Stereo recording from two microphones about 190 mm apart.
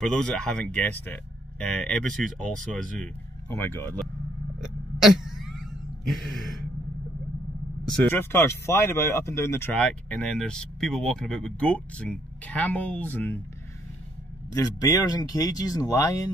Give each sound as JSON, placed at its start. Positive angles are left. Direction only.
{"t": 0.0, "sound": "speech", "side_deg": 5}
{"t": 4.6, "sound": "a sound", "side_deg": 0}
{"t": 8.0, "sound": "speech", "side_deg": 10}
{"t": 14.5, "sound": "speech", "side_deg": 15}